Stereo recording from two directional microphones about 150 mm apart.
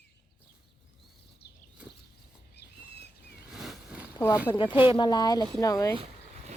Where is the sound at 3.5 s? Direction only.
5° right (ahead or behind).